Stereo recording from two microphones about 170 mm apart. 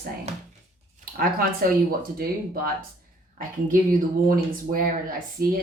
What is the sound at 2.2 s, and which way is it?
Speech, 60° right (ahead or behind).